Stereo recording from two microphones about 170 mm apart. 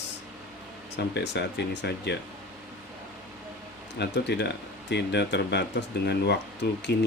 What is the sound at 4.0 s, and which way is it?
Speech, 85° left.